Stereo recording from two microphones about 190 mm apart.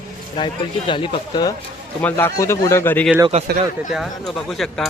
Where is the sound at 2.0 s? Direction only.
10° left (ahead or behind).